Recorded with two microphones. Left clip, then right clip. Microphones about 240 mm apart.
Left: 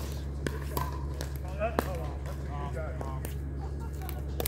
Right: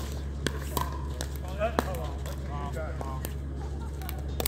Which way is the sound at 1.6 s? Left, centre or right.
Right.